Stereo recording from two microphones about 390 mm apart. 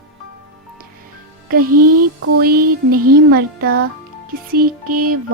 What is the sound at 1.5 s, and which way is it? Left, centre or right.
Speech, right.